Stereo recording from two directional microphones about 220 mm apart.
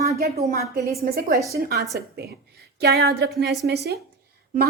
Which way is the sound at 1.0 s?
45° right (ahead or behind).